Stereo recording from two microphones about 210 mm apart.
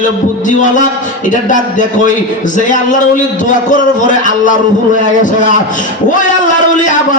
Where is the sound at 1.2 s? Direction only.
35° left (ahead or behind).